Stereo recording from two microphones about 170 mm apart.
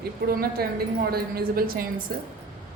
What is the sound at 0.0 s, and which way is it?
A woman's voice, 65° right (ahead or behind).